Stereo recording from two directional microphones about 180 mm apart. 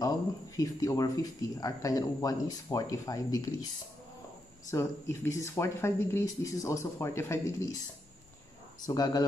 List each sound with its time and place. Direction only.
0.6 s speech: 20° left (ahead or behind)
4.6 s speech: 15° left (ahead or behind)
8.8 s speech: 20° left (ahead or behind)